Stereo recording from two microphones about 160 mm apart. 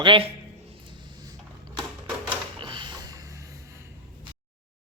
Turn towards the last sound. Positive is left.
turn(degrees=-25)  # may be behind; listen again after turning